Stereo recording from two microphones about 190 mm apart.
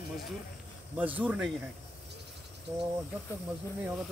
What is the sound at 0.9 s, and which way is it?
Speech, 10° right (ahead or behind).